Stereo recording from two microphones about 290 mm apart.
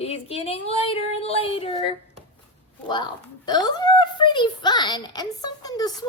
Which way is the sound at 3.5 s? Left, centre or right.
Centre.